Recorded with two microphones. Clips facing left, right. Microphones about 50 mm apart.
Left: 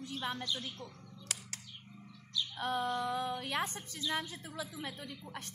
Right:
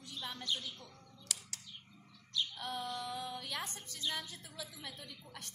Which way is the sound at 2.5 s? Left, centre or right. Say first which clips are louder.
Left 7 dB; left.